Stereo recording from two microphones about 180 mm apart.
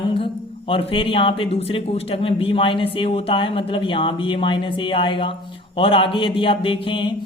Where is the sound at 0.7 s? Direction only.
30° left (ahead or behind).